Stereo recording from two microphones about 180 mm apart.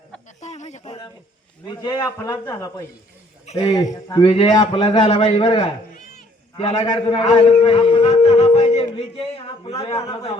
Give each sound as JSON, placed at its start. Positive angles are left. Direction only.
{"t": 0.3, "sound": "a sound", "side_deg": 40}
{"t": 1.6, "sound": "a man's voice", "side_deg": 20}
{"t": 3.4, "sound": "speech", "side_deg": 35}
{"t": 3.8, "sound": "a man's voice", "side_deg": 25}